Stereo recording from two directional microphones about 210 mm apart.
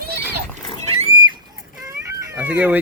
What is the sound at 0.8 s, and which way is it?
Pig, 30° right (ahead or behind).